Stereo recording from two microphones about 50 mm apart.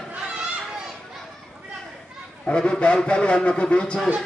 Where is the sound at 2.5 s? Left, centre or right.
Left.